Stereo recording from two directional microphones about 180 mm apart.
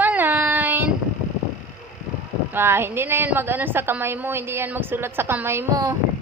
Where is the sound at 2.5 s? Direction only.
15° right (ahead or behind).